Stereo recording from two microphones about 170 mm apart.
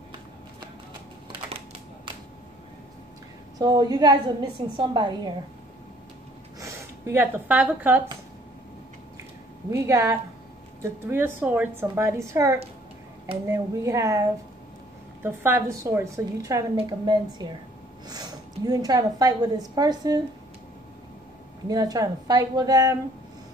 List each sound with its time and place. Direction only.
3.5 s a woman's voice: 20° right (ahead or behind)
6.6 s speech: 10° right (ahead or behind)
9.7 s a woman's voice: 15° right (ahead or behind)
21.6 s a woman's voice: 20° right (ahead or behind)